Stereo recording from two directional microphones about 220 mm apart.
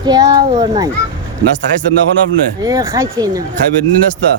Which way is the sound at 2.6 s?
15° right (ahead or behind).